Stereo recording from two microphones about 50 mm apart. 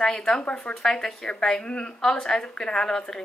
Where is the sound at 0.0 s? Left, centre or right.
Centre.